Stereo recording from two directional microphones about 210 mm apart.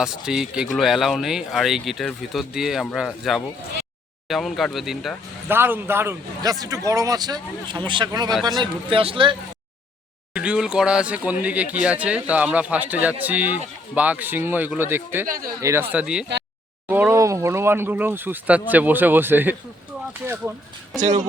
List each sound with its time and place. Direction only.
0.0 s a man's voice: 5° right (ahead or behind); by 9.3 s 25° right (ahead or behind)
10.3 s speech: 5° right (ahead or behind)